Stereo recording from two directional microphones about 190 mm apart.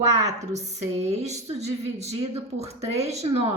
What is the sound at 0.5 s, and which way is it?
A woman's voice, 35° right (ahead or behind).